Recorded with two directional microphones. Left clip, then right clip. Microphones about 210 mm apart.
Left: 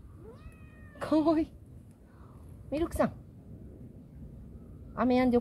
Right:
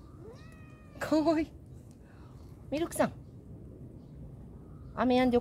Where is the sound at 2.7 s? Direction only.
20° left (ahead or behind).